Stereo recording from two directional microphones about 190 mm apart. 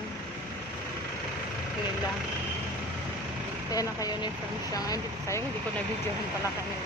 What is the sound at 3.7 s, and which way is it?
Speech, 20° left (ahead or behind).